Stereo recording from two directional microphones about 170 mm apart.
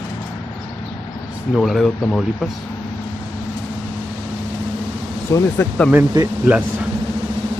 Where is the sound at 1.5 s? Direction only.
Centre (ahead or behind).